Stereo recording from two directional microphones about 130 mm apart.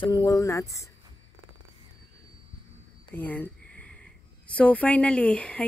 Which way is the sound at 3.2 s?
10° left (ahead or behind).